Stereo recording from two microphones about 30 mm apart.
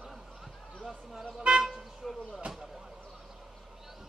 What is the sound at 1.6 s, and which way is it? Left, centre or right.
Toot, centre.